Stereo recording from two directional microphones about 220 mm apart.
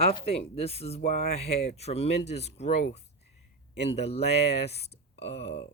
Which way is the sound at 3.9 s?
30° left (ahead or behind).